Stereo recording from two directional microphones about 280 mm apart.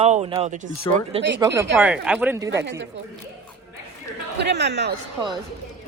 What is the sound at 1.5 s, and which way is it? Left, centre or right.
Speech, centre.